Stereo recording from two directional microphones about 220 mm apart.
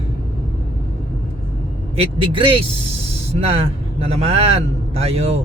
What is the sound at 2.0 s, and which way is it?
A man's voice, 25° right (ahead or behind).